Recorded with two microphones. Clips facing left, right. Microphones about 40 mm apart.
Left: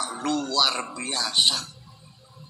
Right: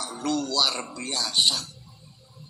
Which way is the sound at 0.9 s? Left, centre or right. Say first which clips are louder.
Left 1 dB; left.